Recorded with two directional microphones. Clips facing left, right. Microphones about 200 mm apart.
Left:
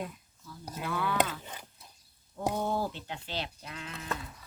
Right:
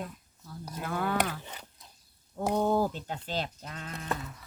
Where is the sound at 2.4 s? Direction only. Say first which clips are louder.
Right 4 dB; 40° right (ahead or behind).